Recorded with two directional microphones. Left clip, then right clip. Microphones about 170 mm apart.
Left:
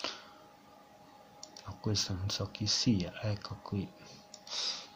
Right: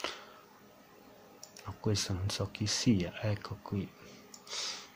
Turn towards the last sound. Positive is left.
turn(degrees=-10)  # may be behind; listen again after turning